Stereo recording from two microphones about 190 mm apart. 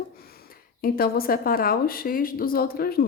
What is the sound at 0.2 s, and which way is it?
Speech, 55° left (ahead or behind).